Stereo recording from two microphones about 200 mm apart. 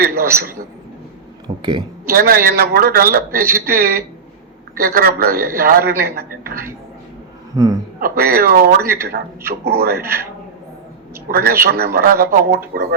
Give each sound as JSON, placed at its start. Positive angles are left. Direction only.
{"t": 0.0, "sound": "a sound", "side_deg": -45}
{"t": 1.5, "sound": "speech", "side_deg": -25}
{"t": 2.1, "sound": "speech", "side_deg": -45}
{"t": 7.5, "sound": "a man's voice", "side_deg": -15}
{"t": 7.9, "sound": "speech", "side_deg": -45}
{"t": 11.3, "sound": "speech", "side_deg": -50}